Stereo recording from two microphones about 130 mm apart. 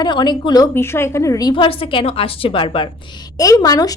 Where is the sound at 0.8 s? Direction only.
20° left (ahead or behind).